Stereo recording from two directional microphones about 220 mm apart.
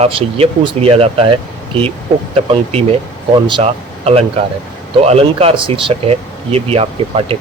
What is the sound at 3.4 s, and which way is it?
Speech, 25° right (ahead or behind).